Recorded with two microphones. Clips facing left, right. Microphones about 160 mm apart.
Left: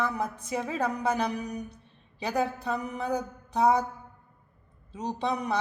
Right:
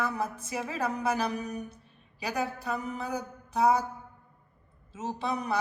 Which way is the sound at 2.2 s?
25° left (ahead or behind).